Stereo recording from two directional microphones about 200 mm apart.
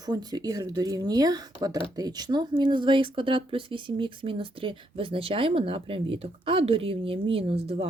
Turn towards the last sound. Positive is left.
turn(degrees=-30)  # may be behind; listen again after turning